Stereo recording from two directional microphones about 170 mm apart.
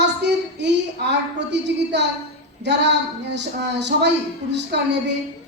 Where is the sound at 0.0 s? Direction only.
90° right.